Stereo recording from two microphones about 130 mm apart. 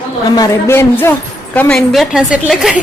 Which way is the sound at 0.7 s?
20° left (ahead or behind).